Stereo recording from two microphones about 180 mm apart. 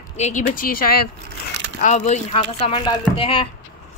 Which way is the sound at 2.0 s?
30° left (ahead or behind).